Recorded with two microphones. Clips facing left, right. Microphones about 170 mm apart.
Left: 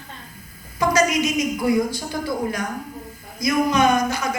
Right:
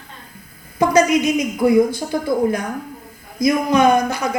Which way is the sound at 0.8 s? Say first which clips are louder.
Right 5 dB; 55° right (ahead or behind).